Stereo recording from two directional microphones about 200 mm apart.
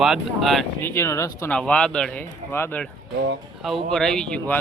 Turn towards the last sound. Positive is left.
turn(degrees=5)  # may be behind; listen again after turning